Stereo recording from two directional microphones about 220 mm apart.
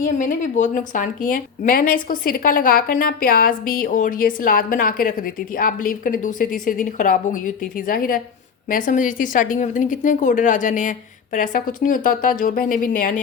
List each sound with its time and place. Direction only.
0.2 s a woman's voice: 35° left (ahead or behind)